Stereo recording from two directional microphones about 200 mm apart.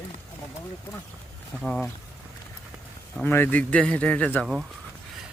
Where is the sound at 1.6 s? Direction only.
Centre (ahead or behind).